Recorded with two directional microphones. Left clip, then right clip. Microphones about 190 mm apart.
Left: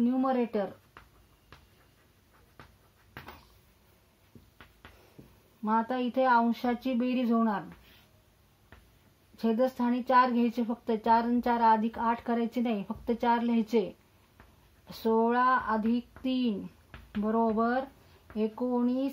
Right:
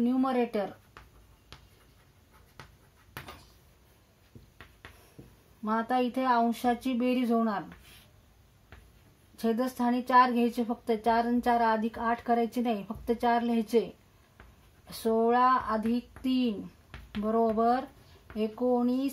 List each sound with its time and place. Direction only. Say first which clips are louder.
0.0 s speech: even; 25° left (ahead or behind)
5.6 s a woman's voice: right 1 dB; 35° left (ahead or behind)
9.4 s a woman's voice: left 1 dB; 35° left (ahead or behind)
14.9 s a woman's voice: right 1 dB; 40° left (ahead or behind)